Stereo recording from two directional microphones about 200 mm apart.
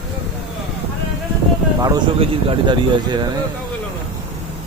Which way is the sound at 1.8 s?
25° right (ahead or behind).